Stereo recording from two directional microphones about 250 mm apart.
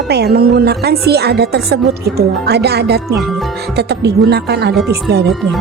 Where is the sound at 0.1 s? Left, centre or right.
Right.